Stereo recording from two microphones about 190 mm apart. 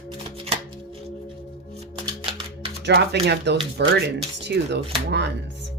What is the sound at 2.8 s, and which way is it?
A woman's voice, 60° right (ahead or behind).